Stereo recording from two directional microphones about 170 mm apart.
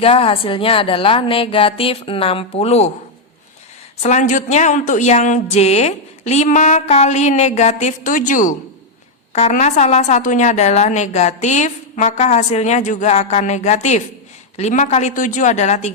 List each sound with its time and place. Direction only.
0.0 s a woman's voice: 35° left (ahead or behind)
4.0 s a woman's voice: 45° left (ahead or behind)